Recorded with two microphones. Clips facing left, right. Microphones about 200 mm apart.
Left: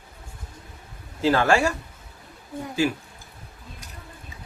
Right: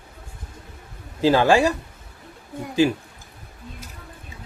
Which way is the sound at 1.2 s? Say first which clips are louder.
Right 3 dB; 15° right (ahead or behind).